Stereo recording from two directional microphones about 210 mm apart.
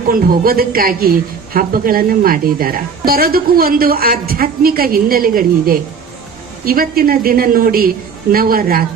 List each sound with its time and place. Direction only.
0.1 s a woman's voice: 45° right (ahead or behind)